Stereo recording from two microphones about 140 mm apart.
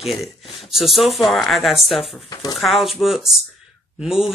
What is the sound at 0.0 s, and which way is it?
Speech, centre (ahead or behind).